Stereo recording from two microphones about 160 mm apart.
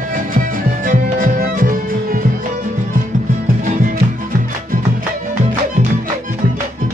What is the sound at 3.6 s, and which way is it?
Music, 60° right (ahead or behind).